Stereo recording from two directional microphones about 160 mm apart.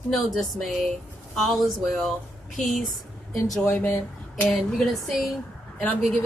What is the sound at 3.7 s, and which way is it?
Speech, 15° left (ahead or behind).